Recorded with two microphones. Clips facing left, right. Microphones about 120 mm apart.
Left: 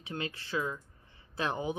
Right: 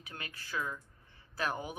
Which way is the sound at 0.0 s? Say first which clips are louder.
Left 9 dB; 25° left (ahead or behind).